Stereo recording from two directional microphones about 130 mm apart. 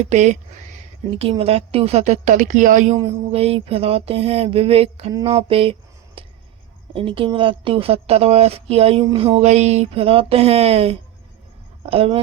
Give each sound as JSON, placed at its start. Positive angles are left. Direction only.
{"t": 0.1, "sound": "a woman's voice", "side_deg": -60}
{"t": 1.2, "sound": "a woman's voice", "side_deg": -50}
{"t": 3.1, "sound": "a woman's voice", "side_deg": -50}
{"t": 6.2, "sound": "a sound", "side_deg": -45}
{"t": 6.9, "sound": "a woman's voice", "side_deg": -45}